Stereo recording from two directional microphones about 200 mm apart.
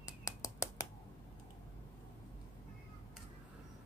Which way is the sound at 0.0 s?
15° left (ahead or behind).